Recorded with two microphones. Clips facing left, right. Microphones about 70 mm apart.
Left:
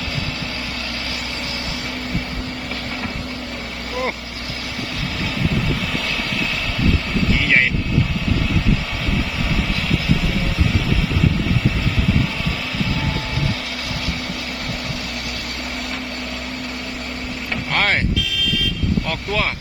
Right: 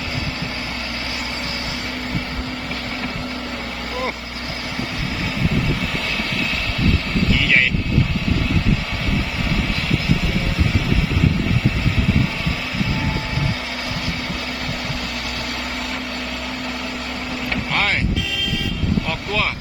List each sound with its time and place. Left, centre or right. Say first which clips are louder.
17.7 s music: left 2 dB; left